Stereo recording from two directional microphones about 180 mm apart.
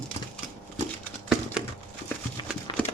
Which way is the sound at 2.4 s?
25° left (ahead or behind).